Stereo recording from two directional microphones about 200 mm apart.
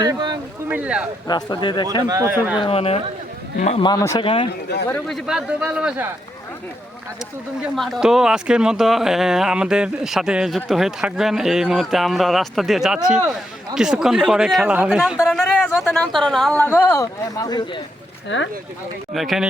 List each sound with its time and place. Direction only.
0.0 s speech: 20° right (ahead or behind)
0.7 s speech: 5° right (ahead or behind)
1.3 s a man's voice: 20° left (ahead or behind)
2.0 s speech: 15° right (ahead or behind)
2.6 s a man's voice: 30° left (ahead or behind)
3.8 s a man's voice: 15° left (ahead or behind)
4.9 s speech: 5° left (ahead or behind)
7.8 s speech: centre (ahead or behind)
16.6 s speech: 10° left (ahead or behind)
18.3 s speech: 65° left (ahead or behind)
19.1 s speech: centre (ahead or behind)